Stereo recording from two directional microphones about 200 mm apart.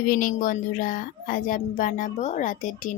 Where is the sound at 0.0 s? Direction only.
45° left (ahead or behind).